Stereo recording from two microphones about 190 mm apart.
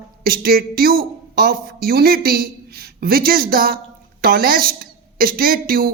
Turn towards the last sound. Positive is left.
turn(degrees=-50)  # may be behind; listen again after turning